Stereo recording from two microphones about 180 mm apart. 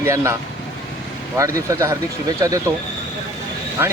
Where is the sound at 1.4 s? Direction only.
20° right (ahead or behind).